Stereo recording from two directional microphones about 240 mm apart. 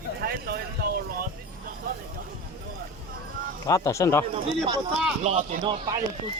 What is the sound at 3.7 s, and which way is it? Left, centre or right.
Speech, centre.